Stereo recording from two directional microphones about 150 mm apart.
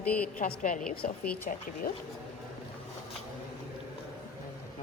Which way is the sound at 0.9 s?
80° left.